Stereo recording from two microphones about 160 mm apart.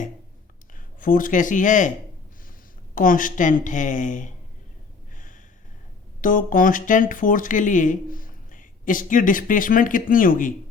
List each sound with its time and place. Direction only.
0.9 s speech: 60° left (ahead or behind)
2.9 s speech: 55° left (ahead or behind)
5.1 s a sound: 55° left (ahead or behind)
6.2 s speech: 55° left (ahead or behind)